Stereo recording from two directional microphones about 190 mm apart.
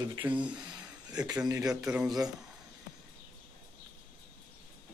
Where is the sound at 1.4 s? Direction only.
15° right (ahead or behind).